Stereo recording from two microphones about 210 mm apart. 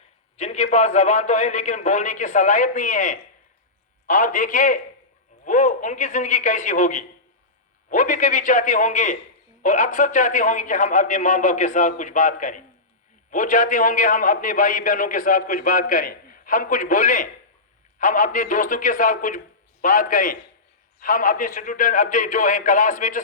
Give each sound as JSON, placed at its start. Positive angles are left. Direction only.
{"t": 0.3, "sound": "a man's voice", "side_deg": 30}